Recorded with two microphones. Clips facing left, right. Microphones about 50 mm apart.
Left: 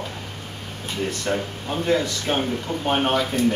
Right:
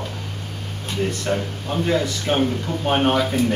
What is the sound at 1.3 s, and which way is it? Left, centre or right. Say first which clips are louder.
Speech: right 1 dB; centre.